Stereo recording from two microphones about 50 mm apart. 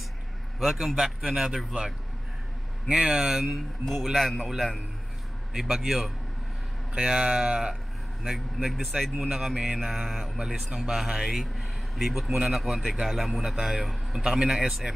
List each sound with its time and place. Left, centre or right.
0.6 s speech: centre
2.9 s speech: centre
3.4 s speech: centre
5.5 s speech: centre